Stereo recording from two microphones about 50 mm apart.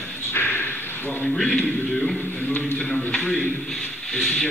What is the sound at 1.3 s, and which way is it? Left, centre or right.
Music, centre.